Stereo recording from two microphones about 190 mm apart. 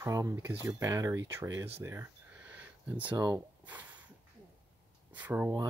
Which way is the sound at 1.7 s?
15° right (ahead or behind).